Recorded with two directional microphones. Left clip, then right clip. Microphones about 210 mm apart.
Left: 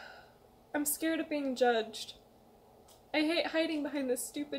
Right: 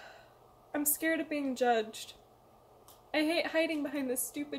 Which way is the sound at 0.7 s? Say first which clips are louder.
Right 1 dB; 5° right (ahead or behind).